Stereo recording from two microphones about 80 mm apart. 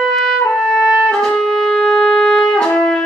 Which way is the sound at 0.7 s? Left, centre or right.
Centre.